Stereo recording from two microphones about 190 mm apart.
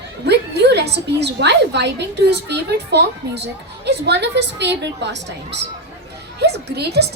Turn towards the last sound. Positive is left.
turn(degrees=-60)  # may be behind; listen again after turning